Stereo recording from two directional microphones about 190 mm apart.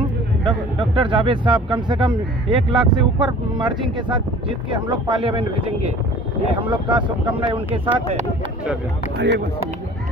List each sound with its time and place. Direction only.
0.5 s speech: 25° right (ahead or behind)
9.2 s speech: 65° right (ahead or behind)